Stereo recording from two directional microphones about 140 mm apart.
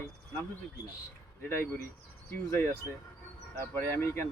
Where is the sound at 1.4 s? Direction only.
15° left (ahead or behind).